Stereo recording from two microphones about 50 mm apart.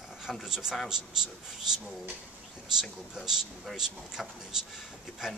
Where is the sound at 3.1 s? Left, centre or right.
Centre.